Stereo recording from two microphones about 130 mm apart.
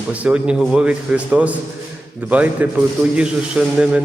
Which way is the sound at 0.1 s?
10° right (ahead or behind).